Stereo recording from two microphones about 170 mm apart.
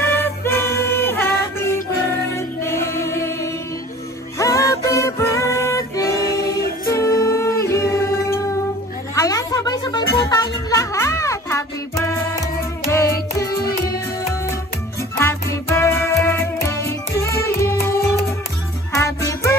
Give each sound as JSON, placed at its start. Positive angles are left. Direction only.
{"t": 0.0, "sound": "music", "side_deg": 15}
{"t": 2.3, "sound": "music", "side_deg": 15}
{"t": 4.4, "sound": "music", "side_deg": 20}
{"t": 15.1, "sound": "music", "side_deg": 15}